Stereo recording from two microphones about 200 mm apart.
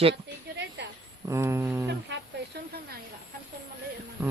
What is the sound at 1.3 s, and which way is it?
Speech, 15° right (ahead or behind).